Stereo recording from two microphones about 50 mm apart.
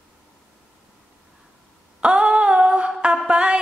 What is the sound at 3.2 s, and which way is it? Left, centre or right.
Music, centre.